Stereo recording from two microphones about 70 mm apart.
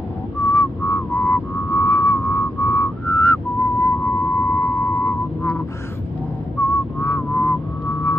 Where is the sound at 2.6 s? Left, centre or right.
Left.